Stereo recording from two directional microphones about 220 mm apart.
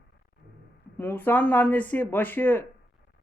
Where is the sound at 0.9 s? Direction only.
10° left (ahead or behind).